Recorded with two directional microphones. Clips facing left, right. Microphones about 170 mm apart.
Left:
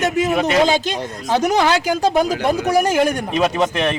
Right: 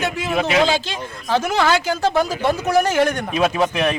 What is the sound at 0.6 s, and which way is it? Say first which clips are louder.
Speech: left 3 dB; 15° left (ahead or behind).